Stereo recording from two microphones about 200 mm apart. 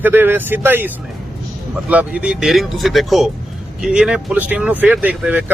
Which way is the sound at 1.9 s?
5° right (ahead or behind).